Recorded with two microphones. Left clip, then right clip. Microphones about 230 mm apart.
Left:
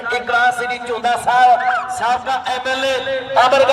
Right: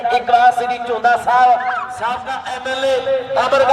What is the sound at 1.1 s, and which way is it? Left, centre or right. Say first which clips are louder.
A man's voice: even; left.